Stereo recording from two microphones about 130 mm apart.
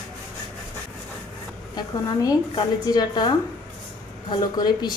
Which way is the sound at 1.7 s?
30° left (ahead or behind).